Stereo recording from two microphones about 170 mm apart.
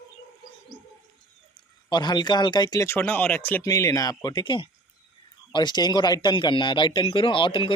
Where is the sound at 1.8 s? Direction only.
25° left (ahead or behind).